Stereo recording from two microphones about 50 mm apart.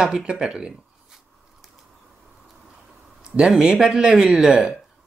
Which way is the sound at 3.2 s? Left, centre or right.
Centre.